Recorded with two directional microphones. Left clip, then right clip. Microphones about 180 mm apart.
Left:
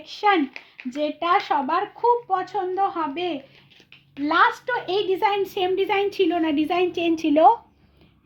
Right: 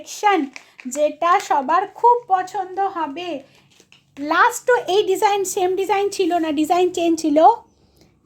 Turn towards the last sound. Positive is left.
turn(degrees=-30)  # may be behind; listen again after turning